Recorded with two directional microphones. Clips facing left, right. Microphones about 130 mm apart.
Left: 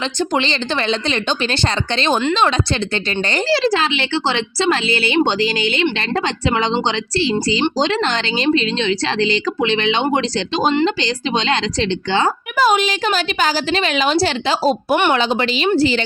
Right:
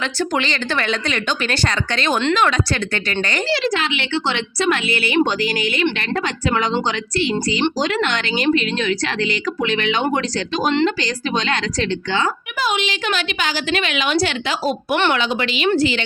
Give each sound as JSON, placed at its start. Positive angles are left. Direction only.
{"t": 0.0, "sound": "a woman's voice", "side_deg": 25}